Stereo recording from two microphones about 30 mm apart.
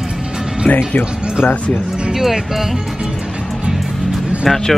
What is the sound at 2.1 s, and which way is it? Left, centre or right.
Speech, centre.